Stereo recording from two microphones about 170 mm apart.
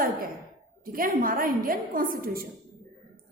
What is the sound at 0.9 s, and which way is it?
A woman's voice, 55° right (ahead or behind).